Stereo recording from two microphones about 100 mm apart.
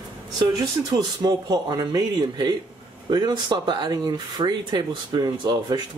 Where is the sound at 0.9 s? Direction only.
40° right (ahead or behind).